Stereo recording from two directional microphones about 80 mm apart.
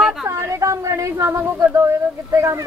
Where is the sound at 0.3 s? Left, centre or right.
Right.